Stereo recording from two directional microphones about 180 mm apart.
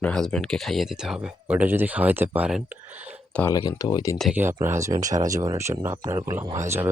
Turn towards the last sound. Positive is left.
turn(degrees=-15)  # may be behind; listen again after turning